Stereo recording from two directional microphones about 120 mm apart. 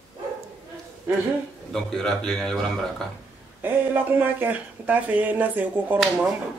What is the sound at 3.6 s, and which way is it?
Speech, 15° right (ahead or behind).